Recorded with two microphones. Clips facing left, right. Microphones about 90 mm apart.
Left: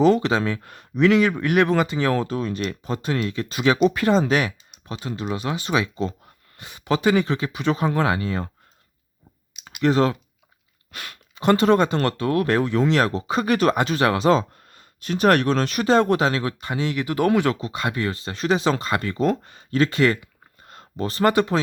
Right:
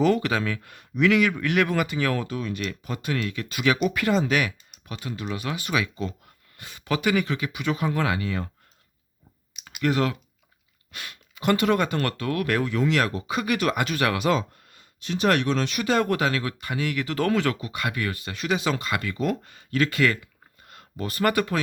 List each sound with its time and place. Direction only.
0.0 s speech: 25° left (ahead or behind)
9.8 s speech: 30° left (ahead or behind)
10.9 s speech: 50° left (ahead or behind)
11.3 s speech: 30° left (ahead or behind)